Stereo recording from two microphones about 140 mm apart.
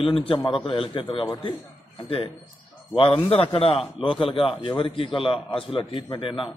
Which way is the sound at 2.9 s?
40° left (ahead or behind).